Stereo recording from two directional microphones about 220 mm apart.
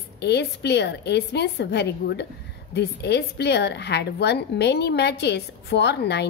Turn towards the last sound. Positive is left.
turn(degrees=50)  # may be behind; listen again after turning